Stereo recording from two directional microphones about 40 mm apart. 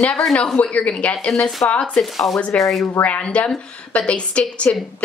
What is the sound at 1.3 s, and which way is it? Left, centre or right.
Speech, centre.